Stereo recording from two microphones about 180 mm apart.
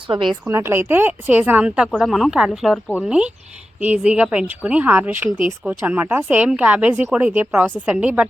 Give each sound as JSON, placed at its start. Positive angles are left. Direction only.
{"t": 0.1, "sound": "a woman's voice", "side_deg": -25}
{"t": 0.4, "sound": "speech", "side_deg": -15}